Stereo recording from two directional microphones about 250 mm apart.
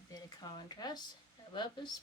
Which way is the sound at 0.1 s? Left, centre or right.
Centre.